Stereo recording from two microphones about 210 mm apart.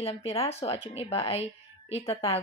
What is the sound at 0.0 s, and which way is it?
Speech, 30° left (ahead or behind).